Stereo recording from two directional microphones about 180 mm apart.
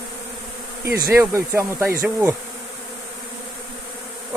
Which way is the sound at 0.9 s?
15° right (ahead or behind).